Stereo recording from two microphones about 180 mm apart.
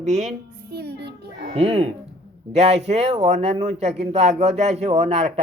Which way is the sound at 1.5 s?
35° right (ahead or behind).